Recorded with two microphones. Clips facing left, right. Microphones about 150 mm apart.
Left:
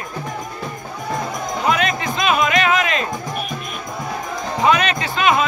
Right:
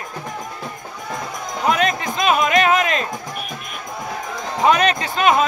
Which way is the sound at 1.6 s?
40° right (ahead or behind).